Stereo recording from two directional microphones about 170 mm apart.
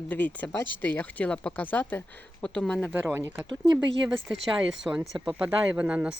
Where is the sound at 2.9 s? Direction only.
15° right (ahead or behind).